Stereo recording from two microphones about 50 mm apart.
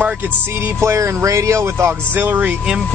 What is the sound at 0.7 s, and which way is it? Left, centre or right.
Speech, right.